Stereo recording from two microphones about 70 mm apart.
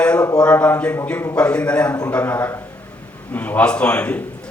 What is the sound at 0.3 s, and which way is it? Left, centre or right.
A man's voice, centre.